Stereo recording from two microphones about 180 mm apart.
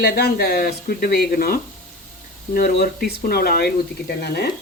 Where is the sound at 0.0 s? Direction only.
60° left (ahead or behind).